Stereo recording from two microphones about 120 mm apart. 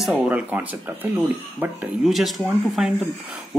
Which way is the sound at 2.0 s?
Centre (ahead or behind).